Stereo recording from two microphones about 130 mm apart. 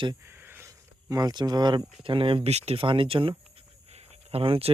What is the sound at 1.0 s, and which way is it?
Speech, 30° right (ahead or behind).